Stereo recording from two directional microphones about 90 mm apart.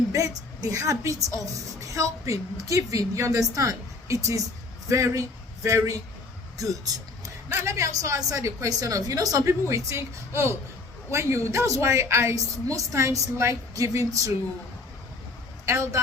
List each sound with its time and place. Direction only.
0.1 s a woman's voice: 40° right (ahead or behind)
15.6 s a woman's voice: 35° right (ahead or behind)